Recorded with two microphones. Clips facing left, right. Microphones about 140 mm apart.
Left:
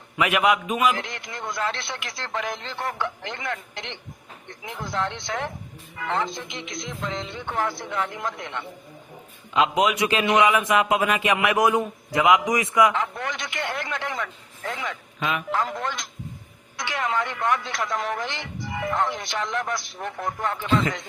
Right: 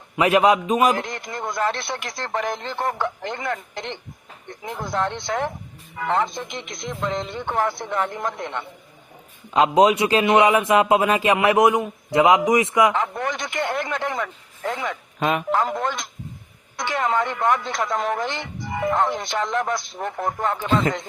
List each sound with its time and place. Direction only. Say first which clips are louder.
0.2 s a man's voice: right 5 dB; 35° right (ahead or behind); by 8.6 s 50° right (ahead or behind)
9.5 s a man's voice: right 5 dB; 35° right (ahead or behind)
13.0 s a sound: right 4 dB; 50° right (ahead or behind)
14.7 s telephone: right 4 dB; 50° right (ahead or behind)
16.7 s a man's voice: right 4 dB; 50° right (ahead or behind)